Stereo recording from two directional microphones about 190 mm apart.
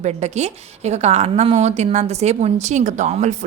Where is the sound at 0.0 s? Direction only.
35° right (ahead or behind).